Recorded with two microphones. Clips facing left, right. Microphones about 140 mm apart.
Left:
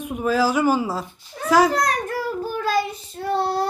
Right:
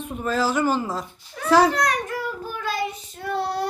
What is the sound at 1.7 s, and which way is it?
Speech, 35° left (ahead or behind).